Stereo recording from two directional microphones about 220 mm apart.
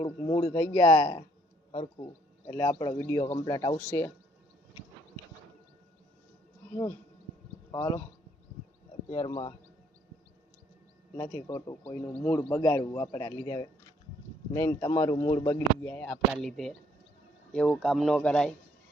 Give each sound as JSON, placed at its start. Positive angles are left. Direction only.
{"t": 0.0, "sound": "speech", "side_deg": 20}
{"t": 7.7, "sound": "speech", "side_deg": 15}
{"t": 9.0, "sound": "speech", "side_deg": 20}
{"t": 11.2, "sound": "speech", "side_deg": 15}